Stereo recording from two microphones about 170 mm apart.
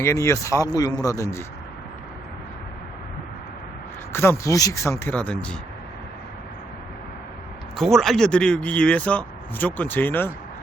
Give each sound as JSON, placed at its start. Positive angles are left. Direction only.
{"t": 0.0, "sound": "speech", "side_deg": 15}
{"t": 4.1, "sound": "speech", "side_deg": 15}
{"t": 7.8, "sound": "speech", "side_deg": 0}